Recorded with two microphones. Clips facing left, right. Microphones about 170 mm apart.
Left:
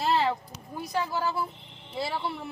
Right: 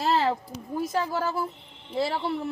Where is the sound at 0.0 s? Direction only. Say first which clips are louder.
Right 2 dB; 40° right (ahead or behind).